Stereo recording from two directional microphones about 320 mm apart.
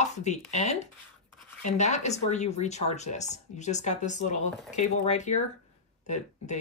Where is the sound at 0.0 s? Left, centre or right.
Left.